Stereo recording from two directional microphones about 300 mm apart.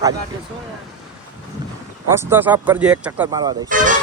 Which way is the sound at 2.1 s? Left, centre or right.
Centre.